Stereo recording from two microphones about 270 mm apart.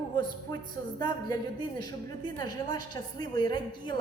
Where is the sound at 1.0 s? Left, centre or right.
Centre.